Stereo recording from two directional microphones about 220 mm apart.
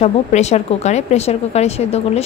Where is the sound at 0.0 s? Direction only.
30° left (ahead or behind).